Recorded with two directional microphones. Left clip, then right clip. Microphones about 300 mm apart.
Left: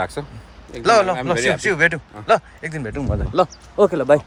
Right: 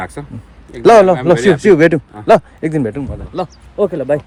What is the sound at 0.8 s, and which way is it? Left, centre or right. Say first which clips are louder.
Speech: right 8 dB; centre.